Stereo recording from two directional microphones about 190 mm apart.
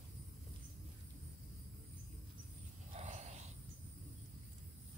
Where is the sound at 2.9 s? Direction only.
35° right (ahead or behind).